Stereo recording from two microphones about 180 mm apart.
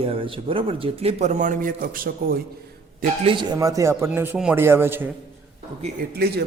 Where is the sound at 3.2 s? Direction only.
30° right (ahead or behind); by 5.1 s 10° right (ahead or behind).